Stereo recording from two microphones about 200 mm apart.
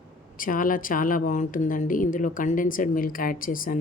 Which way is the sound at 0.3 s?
45° left (ahead or behind).